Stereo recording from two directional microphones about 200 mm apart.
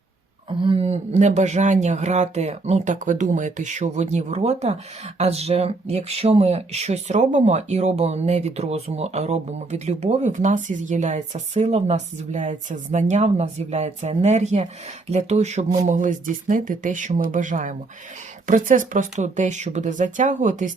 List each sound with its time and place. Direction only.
0.6 s speech: 30° right (ahead or behind)